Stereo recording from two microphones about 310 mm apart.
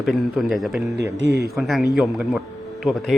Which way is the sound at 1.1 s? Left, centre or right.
Right.